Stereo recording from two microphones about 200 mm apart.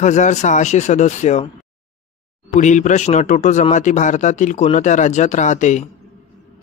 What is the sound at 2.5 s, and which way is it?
Speech, 35° left (ahead or behind).